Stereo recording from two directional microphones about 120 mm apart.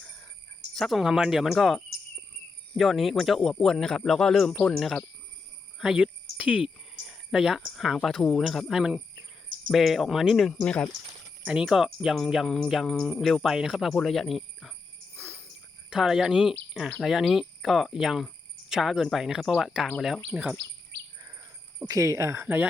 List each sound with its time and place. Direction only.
0.8 s speech: centre (ahead or behind)
5.8 s cricket: 5° right (ahead or behind)
7.8 s speech: centre (ahead or behind)
11.4 s speech: 5° right (ahead or behind)
15.1 s jingle bell: 20° right (ahead or behind)
15.9 s speech: 5° right (ahead or behind)
21.8 s speech: 30° right (ahead or behind)